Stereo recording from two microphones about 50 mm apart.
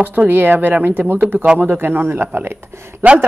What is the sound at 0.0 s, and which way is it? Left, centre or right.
A woman's voice, right.